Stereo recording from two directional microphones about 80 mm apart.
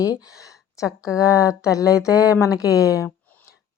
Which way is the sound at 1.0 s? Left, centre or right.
Left.